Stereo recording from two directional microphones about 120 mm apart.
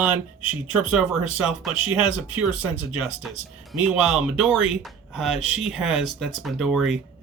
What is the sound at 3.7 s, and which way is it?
Speech, 5° right (ahead or behind).